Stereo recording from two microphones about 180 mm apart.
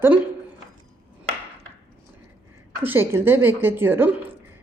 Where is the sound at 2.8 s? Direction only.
10° right (ahead or behind).